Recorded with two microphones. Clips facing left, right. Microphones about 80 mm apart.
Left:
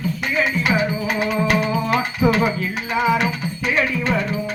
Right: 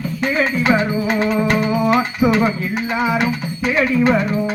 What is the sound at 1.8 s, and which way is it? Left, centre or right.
Music, right.